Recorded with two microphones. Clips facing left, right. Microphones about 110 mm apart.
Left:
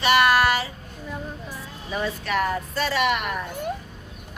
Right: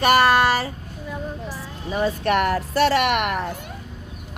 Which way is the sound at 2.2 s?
65° right (ahead or behind).